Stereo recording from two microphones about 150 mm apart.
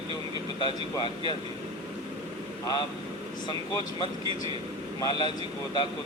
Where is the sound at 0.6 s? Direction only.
30° left (ahead or behind).